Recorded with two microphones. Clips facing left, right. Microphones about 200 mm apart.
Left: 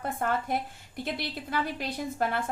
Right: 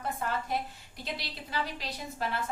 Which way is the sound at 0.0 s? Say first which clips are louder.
Left 4 dB; 55° left (ahead or behind).